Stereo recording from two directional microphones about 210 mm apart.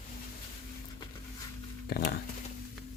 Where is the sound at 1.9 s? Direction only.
50° left (ahead or behind).